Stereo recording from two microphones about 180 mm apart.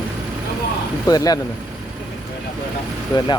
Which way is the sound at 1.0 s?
20° left (ahead or behind).